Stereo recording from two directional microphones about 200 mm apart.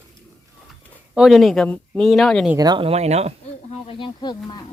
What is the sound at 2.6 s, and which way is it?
Speech, 20° right (ahead or behind).